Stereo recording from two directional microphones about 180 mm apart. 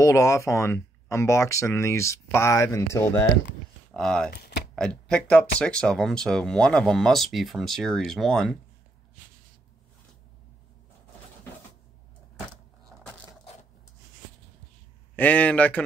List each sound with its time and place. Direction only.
0.0 s speech: 15° left (ahead or behind)
4.3 s a sound: 60° left (ahead or behind)
4.7 s speech: 5° left (ahead or behind)
15.1 s speech: 10° left (ahead or behind)